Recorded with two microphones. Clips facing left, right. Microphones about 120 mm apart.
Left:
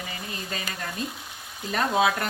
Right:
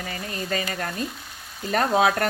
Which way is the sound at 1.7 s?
50° right (ahead or behind).